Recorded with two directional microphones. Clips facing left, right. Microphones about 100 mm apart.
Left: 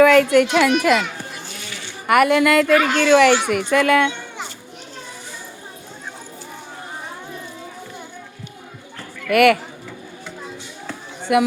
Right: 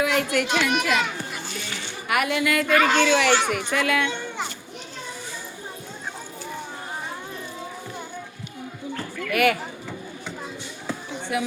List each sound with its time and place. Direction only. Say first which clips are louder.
0.0 s speech: left 10 dB; 65° left (ahead or behind)
2.0 s speech: left 9 dB; 55° left (ahead or behind)
2.6 s speech: left 3 dB; 5° left (ahead or behind)
3.0 s speech: left 6 dB; 50° left (ahead or behind)
9.3 s speech: left 7 dB; 65° left (ahead or behind)
11.3 s speech: left 10 dB; 70° left (ahead or behind)